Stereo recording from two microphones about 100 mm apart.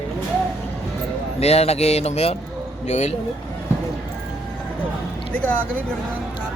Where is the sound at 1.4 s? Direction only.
90° left.